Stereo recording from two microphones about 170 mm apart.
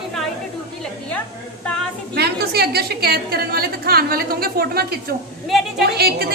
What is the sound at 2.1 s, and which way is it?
A woman's voice, 70° right (ahead or behind).